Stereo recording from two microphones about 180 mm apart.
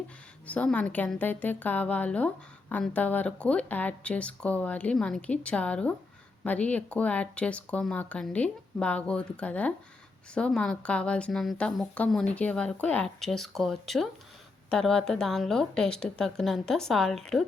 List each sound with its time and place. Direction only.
0.4 s a woman's voice: 5° left (ahead or behind)